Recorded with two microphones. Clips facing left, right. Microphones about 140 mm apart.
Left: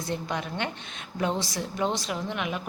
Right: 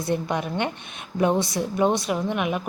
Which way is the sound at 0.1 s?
15° right (ahead or behind).